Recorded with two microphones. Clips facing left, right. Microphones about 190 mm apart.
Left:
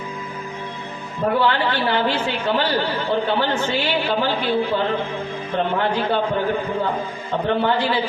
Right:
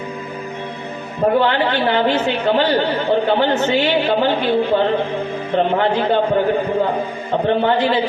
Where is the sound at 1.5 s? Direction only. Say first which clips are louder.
Right 3 dB; 20° right (ahead or behind).